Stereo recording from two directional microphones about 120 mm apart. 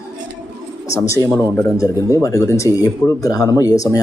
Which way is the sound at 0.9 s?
25° left (ahead or behind).